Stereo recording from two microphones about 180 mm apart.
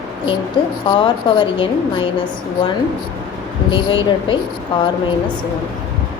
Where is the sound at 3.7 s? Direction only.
25° left (ahead or behind).